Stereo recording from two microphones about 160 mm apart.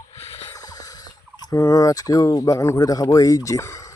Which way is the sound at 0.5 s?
20° left (ahead or behind).